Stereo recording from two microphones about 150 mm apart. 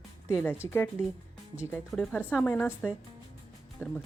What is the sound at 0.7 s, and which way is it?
Speech, 20° left (ahead or behind).